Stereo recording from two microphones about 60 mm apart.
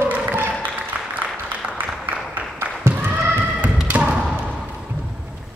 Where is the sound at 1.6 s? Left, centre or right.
Right.